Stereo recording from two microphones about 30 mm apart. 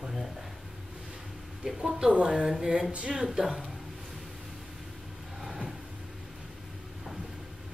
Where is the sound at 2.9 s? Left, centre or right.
Right.